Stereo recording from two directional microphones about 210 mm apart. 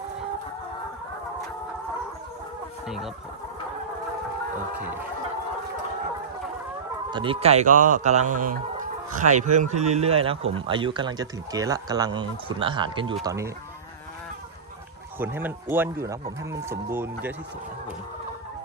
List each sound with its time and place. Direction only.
2.8 s speech: centre (ahead or behind)
7.1 s speech: 25° right (ahead or behind)
15.2 s speech: 10° right (ahead or behind)